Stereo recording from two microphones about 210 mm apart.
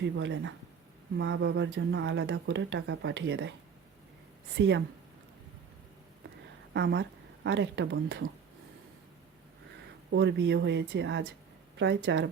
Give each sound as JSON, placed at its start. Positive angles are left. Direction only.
{"t": 0.0, "sound": "speech", "side_deg": -60}
{"t": 4.5, "sound": "speech", "side_deg": -55}
{"t": 6.7, "sound": "speech", "side_deg": -55}
{"t": 10.1, "sound": "speech", "side_deg": -55}